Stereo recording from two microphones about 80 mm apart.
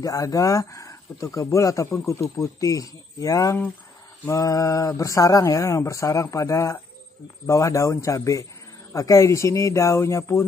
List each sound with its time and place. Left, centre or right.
0.0 s speech: left